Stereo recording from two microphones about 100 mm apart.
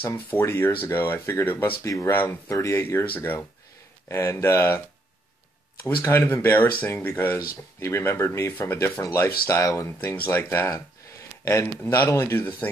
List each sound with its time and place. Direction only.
0.3 s speech: 20° left (ahead or behind)
2.5 s speech: 30° left (ahead or behind)
6.0 s speech: 25° left (ahead or behind)
7.3 s speech: 30° left (ahead or behind)
9.9 s speech: 20° left (ahead or behind)